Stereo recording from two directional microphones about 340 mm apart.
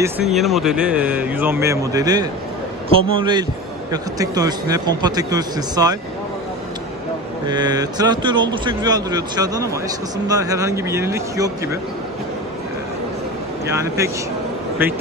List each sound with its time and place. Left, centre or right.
0.0 s speech: centre
7.4 s speech: centre
13.7 s speech: centre